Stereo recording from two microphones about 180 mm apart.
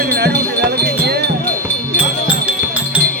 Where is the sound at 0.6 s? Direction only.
60° right (ahead or behind).